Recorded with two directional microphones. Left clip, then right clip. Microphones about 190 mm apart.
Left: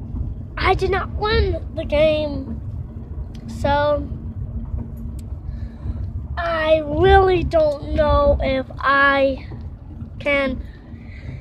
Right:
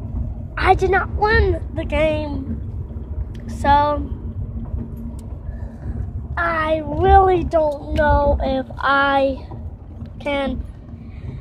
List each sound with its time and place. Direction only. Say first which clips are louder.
0.6 s a woman's voice: right 3 dB; 5° left (ahead or behind)
3.4 s a woman's voice: right 3 dB; 5° left (ahead or behind)
6.4 s a sound: right 1 dB; centre (ahead or behind)
7.0 s speech: right 2 dB; 30° left (ahead or behind)
7.2 s a woman's voice: even; 10° left (ahead or behind)
8.0 s a sound: even; 5° left (ahead or behind)
10.2 s a woman's voice: left 3 dB; 10° left (ahead or behind)